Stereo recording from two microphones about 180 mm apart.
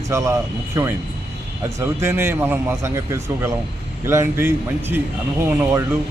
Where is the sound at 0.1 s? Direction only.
15° right (ahead or behind).